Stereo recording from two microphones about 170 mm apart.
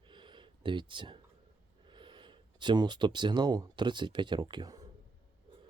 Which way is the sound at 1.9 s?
30° right (ahead or behind).